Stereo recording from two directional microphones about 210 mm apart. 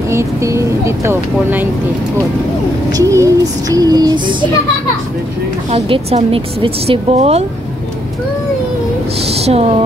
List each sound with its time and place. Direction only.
0.1 s speech: 15° right (ahead or behind)
2.9 s speech: 15° right (ahead or behind)
5.7 s a woman's voice: 30° right (ahead or behind)
9.3 s a woman's voice: 30° right (ahead or behind)